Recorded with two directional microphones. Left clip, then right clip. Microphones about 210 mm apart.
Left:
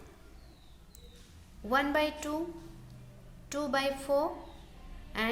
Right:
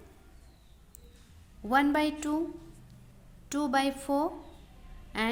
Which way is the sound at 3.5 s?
35° right (ahead or behind).